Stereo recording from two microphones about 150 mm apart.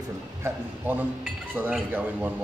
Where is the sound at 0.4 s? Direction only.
10° right (ahead or behind).